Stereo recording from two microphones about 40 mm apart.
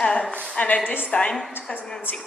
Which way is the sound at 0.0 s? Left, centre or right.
Left.